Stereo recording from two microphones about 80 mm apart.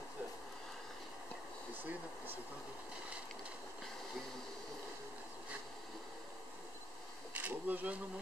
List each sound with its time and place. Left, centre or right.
1.8 s speech: right
7.3 s bee: right